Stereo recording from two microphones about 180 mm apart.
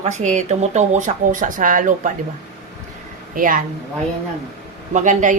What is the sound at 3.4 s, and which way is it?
Speech, 50° right (ahead or behind).